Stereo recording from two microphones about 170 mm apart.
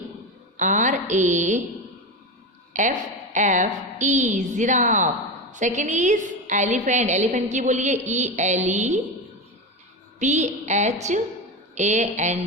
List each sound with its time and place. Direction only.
0.5 s a woman's voice: 50° right (ahead or behind)
2.8 s a woman's voice: 45° right (ahead or behind)
10.2 s a woman's voice: 45° right (ahead or behind)